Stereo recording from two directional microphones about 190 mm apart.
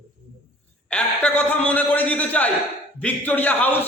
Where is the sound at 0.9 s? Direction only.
5° left (ahead or behind).